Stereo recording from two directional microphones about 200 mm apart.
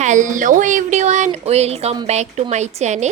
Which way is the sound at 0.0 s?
40° right (ahead or behind).